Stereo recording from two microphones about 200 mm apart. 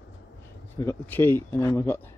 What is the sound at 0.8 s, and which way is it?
Speech, 10° left (ahead or behind).